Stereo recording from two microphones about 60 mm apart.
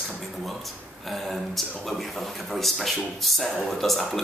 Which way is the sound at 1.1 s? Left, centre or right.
Centre.